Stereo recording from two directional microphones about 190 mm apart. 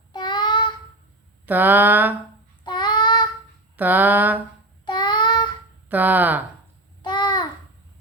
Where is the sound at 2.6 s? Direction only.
25° left (ahead or behind).